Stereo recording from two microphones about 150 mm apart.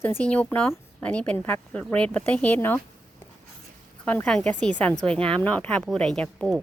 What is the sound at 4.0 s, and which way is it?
Speech, 10° left (ahead or behind).